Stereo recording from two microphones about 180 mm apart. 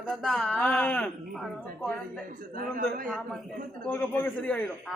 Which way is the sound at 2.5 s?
50° right (ahead or behind).